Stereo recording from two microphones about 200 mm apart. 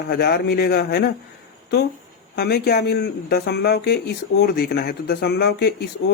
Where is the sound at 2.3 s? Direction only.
50° left (ahead or behind).